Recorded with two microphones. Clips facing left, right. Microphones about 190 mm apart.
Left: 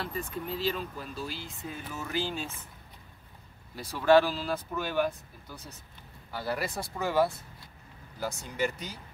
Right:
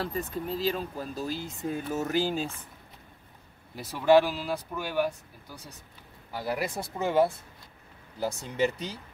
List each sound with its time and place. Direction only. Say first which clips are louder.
0.0 s speech: right 3 dB; 40° right (ahead or behind)
3.7 s speech: right 1 dB; 20° right (ahead or behind)